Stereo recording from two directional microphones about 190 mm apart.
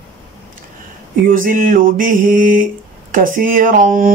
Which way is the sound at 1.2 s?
45° right (ahead or behind).